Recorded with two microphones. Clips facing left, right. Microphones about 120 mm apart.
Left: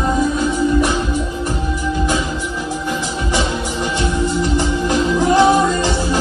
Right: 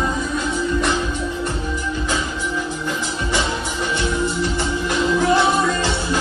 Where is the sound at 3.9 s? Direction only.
20° left (ahead or behind).